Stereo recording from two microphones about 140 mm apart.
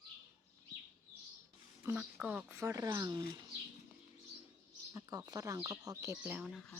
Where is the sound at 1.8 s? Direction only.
10° right (ahead or behind).